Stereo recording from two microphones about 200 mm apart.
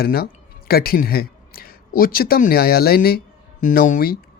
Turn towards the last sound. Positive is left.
turn(degrees=45)  # may be behind; listen again after turning